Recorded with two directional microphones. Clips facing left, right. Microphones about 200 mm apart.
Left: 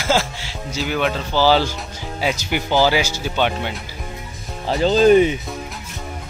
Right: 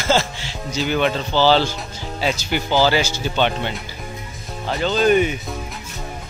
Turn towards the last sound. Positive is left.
turn(degrees=30)  # may be behind; listen again after turning